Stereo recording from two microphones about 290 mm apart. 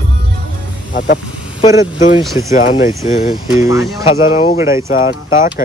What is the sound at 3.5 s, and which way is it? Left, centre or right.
Speech, centre.